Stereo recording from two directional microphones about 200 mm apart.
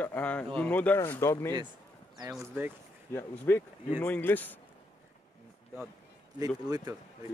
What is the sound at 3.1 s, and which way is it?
Speech, 10° left (ahead or behind).